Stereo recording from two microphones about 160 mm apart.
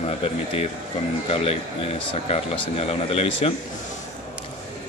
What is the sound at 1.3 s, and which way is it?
Speech, 35° left (ahead or behind).